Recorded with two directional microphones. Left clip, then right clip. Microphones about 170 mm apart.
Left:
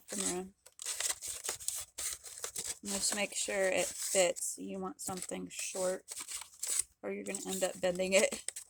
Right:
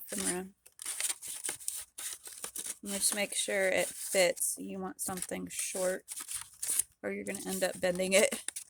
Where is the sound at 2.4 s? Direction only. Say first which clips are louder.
Left 2 dB; 25° right (ahead or behind).